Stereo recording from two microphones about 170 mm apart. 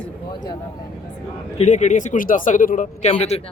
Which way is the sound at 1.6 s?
45° left (ahead or behind).